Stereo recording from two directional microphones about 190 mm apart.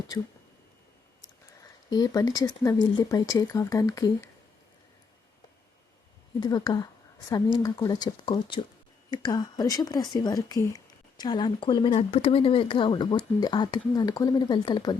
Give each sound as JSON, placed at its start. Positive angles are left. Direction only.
{"t": 1.9, "sound": "speech", "side_deg": 20}
{"t": 6.4, "sound": "speech", "side_deg": 20}